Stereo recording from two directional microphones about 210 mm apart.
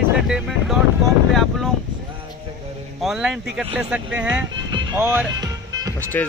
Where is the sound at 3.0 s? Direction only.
Centre (ahead or behind).